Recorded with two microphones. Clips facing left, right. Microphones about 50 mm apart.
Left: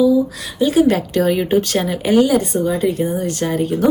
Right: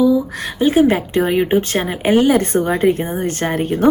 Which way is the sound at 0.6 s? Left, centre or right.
Right.